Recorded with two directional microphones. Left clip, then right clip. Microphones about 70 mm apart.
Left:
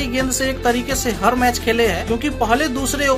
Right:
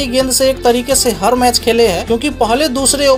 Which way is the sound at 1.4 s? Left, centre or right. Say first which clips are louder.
Right 6 dB; right.